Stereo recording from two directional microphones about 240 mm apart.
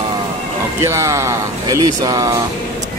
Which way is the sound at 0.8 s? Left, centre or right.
Centre.